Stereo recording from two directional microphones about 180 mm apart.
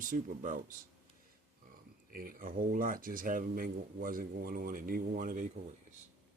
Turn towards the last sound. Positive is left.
turn(degrees=-50)  # may be behind; listen again after turning